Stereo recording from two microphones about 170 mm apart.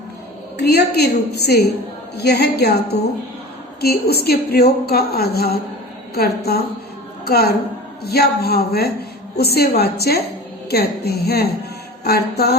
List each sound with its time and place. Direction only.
0.6 s a woman's voice: 70° left (ahead or behind)